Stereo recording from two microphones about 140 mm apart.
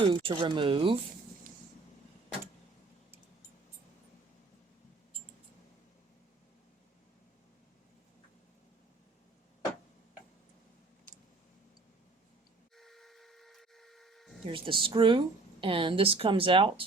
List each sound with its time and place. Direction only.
0.0 s speech: 35° right (ahead or behind)
12.7 s tools: centre (ahead or behind)
14.4 s speech: 40° right (ahead or behind)